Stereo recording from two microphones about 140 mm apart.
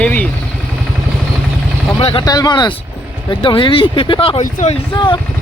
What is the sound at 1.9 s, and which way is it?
Speech, 40° left (ahead or behind).